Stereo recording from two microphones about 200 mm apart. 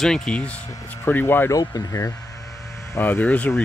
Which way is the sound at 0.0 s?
5° left (ahead or behind).